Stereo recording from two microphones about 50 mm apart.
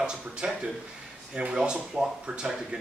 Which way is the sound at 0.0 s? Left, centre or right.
Centre.